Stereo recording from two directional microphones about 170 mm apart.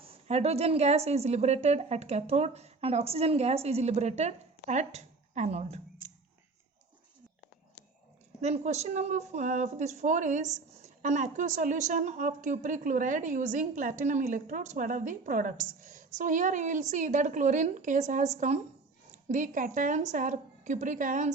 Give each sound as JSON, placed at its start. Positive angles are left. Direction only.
{"t": 0.0, "sound": "a woman's voice", "side_deg": -35}
{"t": 8.4, "sound": "a woman's voice", "side_deg": -40}